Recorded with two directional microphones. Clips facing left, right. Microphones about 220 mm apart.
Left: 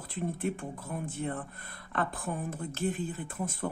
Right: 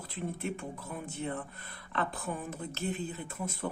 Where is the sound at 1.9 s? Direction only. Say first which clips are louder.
Left 1 dB; 50° left (ahead or behind).